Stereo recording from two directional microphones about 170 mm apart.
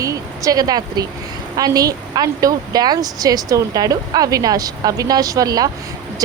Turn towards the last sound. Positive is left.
turn(degrees=-20)  # may be behind; listen again after turning